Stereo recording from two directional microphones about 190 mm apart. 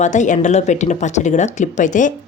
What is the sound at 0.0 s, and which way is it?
Speech, 40° left (ahead or behind).